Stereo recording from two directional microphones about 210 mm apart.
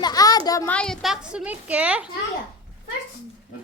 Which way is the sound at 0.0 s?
15° left (ahead or behind).